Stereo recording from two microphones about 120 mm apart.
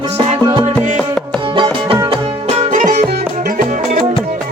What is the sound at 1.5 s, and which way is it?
Music, 45° right (ahead or behind).